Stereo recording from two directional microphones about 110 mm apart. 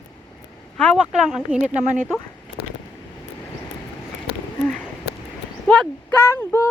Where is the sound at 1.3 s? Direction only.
5° right (ahead or behind).